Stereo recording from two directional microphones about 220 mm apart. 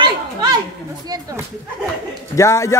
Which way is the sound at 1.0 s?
15° right (ahead or behind).